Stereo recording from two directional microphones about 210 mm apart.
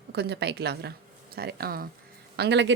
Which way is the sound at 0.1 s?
50° right (ahead or behind).